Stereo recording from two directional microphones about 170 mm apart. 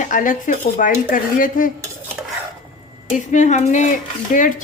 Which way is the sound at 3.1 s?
45° left (ahead or behind).